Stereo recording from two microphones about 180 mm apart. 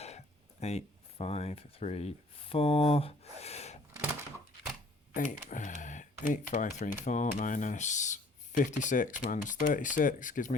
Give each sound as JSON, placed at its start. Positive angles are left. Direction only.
{"t": 0.6, "sound": "speech", "side_deg": 35}
{"t": 5.1, "sound": "speech", "side_deg": 45}